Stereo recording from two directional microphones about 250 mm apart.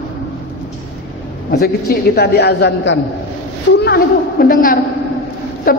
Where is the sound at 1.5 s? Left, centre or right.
Left.